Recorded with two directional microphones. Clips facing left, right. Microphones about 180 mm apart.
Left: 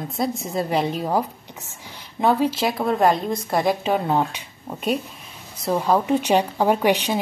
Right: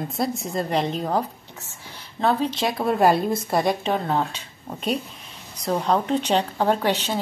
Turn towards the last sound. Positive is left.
turn(degrees=15)  # may be behind; listen again after turning